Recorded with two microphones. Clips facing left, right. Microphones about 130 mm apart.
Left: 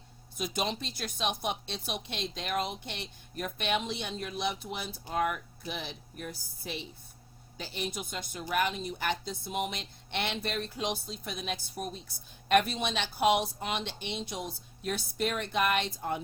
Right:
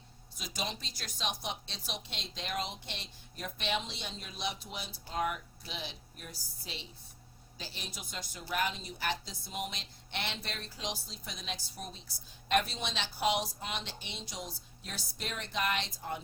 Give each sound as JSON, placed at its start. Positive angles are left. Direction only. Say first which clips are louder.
{"t": 0.3, "sound": "a woman's voice", "louder": "left 7 dB", "side_deg": 55}